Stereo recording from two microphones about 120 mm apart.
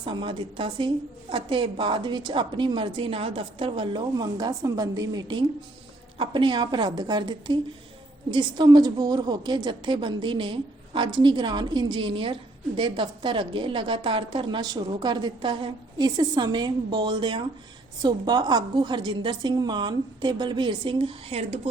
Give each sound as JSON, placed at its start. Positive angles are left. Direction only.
{"t": 0.0, "sound": "a woman's voice", "side_deg": -40}